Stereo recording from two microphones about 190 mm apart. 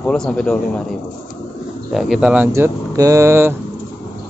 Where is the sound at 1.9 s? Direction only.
Centre (ahead or behind).